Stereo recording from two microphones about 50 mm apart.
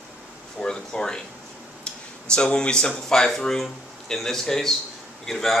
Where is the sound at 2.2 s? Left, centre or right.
Centre.